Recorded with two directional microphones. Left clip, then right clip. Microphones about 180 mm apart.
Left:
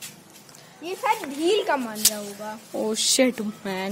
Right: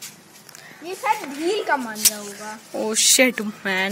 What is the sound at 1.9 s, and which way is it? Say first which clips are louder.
A woman's voice: right 2 dB; 20° left (ahead or behind).